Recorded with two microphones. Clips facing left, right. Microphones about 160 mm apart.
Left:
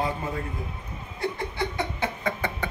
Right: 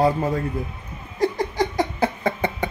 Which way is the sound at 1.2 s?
40° right (ahead or behind).